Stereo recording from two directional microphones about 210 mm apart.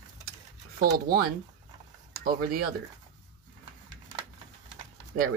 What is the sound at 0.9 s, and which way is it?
Speech, 45° right (ahead or behind).